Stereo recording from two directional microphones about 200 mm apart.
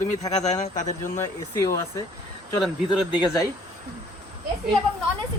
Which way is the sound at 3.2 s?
15° left (ahead or behind).